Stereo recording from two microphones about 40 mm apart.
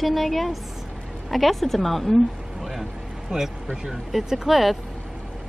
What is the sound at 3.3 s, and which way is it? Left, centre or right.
Speech, right.